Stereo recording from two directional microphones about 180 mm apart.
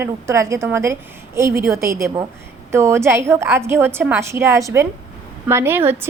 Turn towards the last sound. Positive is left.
turn(degrees=-10)  # may be behind; listen again after turning